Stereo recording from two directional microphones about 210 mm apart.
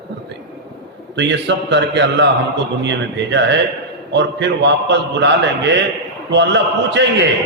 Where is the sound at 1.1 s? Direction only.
55° right (ahead or behind).